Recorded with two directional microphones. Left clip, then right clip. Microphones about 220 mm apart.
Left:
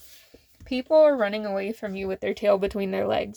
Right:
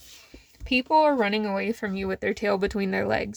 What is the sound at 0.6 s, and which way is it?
Speech, 30° right (ahead or behind).